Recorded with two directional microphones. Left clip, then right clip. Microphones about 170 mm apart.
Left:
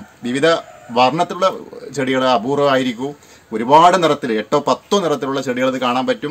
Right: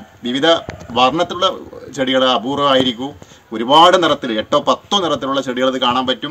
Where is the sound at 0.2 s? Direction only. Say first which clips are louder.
Right 1 dB; 50° left (ahead or behind).